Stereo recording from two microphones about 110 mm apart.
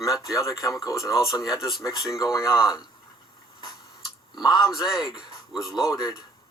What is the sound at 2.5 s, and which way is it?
Speech, 5° right (ahead or behind).